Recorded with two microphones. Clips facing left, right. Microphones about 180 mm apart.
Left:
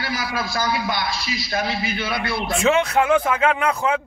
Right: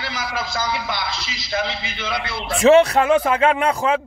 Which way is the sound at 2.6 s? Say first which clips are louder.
Right 6 dB; 35° right (ahead or behind).